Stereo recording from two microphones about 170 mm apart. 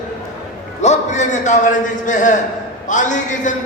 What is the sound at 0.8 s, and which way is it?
A man's voice, 45° left (ahead or behind).